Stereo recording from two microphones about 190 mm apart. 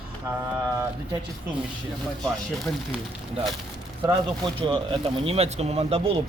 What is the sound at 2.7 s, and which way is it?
Speech, 15° left (ahead or behind).